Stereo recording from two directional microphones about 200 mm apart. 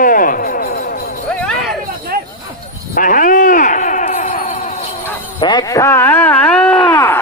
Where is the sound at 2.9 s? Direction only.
45° left (ahead or behind).